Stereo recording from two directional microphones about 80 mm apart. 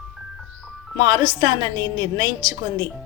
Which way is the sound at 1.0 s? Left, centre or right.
Right.